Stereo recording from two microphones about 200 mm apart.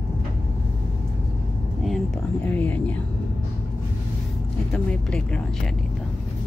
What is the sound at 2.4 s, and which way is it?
Speech, 10° left (ahead or behind).